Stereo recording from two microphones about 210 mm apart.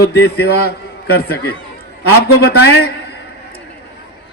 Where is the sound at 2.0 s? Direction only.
50° left (ahead or behind).